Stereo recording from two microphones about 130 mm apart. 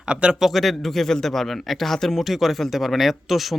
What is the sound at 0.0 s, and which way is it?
Speech, 5° right (ahead or behind).